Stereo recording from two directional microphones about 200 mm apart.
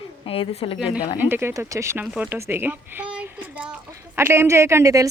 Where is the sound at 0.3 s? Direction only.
30° left (ahead or behind).